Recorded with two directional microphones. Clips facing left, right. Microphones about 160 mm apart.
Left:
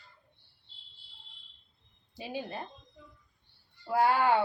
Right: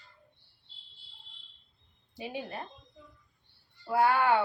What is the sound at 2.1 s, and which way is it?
Speech, 25° left (ahead or behind).